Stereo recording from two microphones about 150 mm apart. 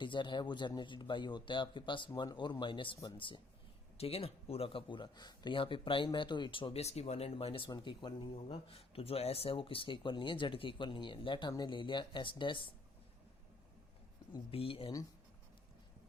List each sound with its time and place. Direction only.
0.0 s speech: 30° left (ahead or behind)
14.5 s speech: 35° left (ahead or behind)